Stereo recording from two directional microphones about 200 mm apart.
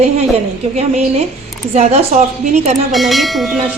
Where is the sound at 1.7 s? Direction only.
35° right (ahead or behind).